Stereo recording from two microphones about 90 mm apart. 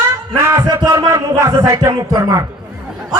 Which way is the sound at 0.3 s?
30° right (ahead or behind).